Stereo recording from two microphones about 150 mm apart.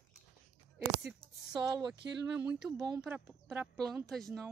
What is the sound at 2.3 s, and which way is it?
Speech, 10° right (ahead or behind).